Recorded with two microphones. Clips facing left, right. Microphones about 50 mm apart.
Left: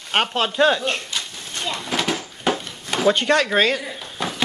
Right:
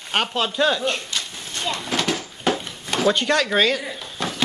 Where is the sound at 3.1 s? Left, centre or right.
Left.